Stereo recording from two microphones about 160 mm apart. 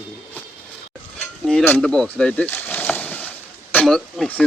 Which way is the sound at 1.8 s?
5° left (ahead or behind).